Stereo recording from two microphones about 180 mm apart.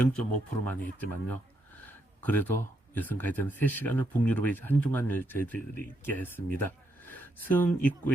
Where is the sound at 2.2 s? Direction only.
10° left (ahead or behind).